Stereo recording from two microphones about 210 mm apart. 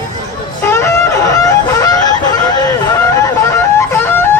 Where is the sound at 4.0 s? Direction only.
10° left (ahead or behind).